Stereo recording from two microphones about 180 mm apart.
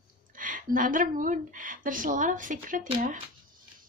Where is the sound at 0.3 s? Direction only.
50° right (ahead or behind).